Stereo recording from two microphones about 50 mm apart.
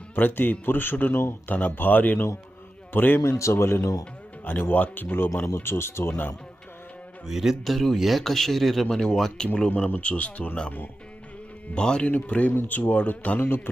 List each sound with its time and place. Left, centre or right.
0.2 s a man's voice: left
3.2 s speech: left
3.5 s speech: left
4.4 s speech: left
5.6 s speech: left
6.1 s speech: left
7.3 s speech: centre
9.6 s speech: left
11.7 s speech: centre
12.0 s speech: left